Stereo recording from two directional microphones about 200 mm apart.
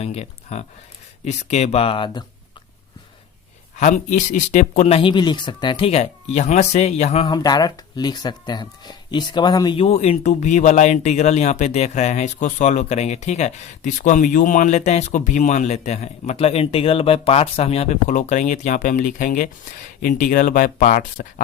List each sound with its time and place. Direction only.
0.0 s speech: 30° left (ahead or behind)
3.8 s speech: 35° left (ahead or behind)
7.3 s speech: 20° left (ahead or behind); by 21.4 s 40° left (ahead or behind)